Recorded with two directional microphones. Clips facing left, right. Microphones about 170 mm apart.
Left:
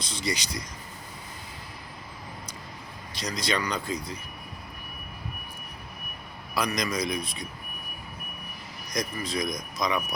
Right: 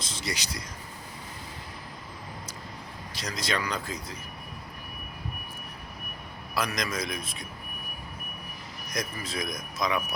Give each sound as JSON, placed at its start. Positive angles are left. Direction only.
{"t": 0.0, "sound": "a man's voice", "side_deg": 0}
{"t": 3.2, "sound": "a man's voice", "side_deg": -5}
{"t": 6.5, "sound": "a man's voice", "side_deg": 0}
{"t": 8.9, "sound": "a man's voice", "side_deg": -5}